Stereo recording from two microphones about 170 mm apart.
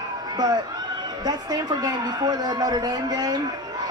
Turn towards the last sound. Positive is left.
turn(degrees=-25)  # may be behind; listen again after turning